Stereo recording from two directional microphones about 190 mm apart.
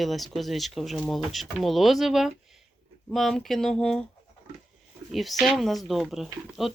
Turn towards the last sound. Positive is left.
turn(degrees=0)  # may be behind; listen again after turning